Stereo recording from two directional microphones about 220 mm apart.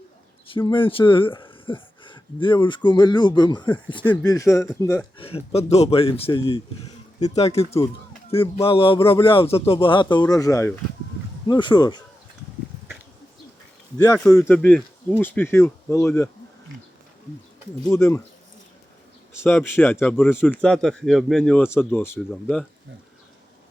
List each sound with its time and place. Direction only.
0.6 s speech: 25° left (ahead or behind)
5.2 s speech: 25° left (ahead or behind)
14.0 s a man's voice: 15° left (ahead or behind)
17.8 s speech: 5° left (ahead or behind)
19.3 s a man's voice: 10° left (ahead or behind)